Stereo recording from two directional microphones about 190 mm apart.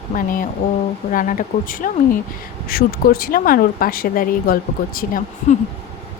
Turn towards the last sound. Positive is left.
turn(degrees=45)  # may be behind; listen again after turning